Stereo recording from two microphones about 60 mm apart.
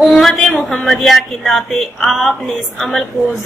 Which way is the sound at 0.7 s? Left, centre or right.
Centre.